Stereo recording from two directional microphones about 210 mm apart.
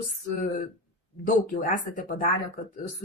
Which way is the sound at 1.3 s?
40° left (ahead or behind).